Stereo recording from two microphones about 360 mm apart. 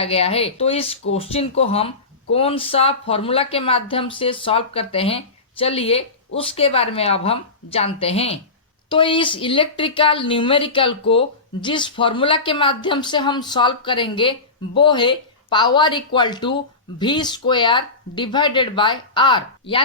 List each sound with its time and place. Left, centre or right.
0.0 s speech: centre